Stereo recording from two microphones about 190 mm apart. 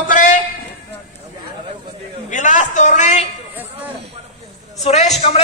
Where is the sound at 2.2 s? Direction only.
40° left (ahead or behind).